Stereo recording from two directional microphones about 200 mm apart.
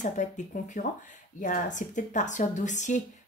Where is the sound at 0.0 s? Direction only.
40° left (ahead or behind).